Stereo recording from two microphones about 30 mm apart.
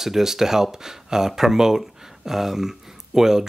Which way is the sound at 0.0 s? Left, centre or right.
Centre.